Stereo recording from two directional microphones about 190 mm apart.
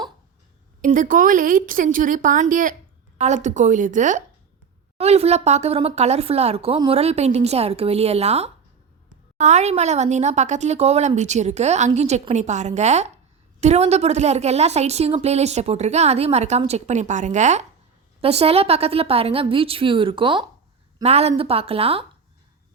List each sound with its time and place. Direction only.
0.8 s a woman's voice: 45° right (ahead or behind)